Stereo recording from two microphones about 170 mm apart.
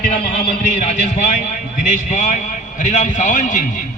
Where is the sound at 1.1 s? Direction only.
40° left (ahead or behind).